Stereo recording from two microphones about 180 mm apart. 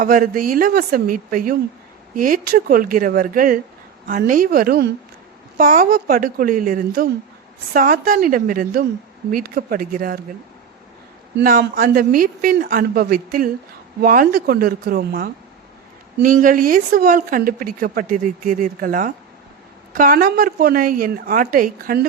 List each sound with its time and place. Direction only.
0.0 s a woman's voice: 50° right (ahead or behind)
11.3 s a woman's voice: 60° right (ahead or behind)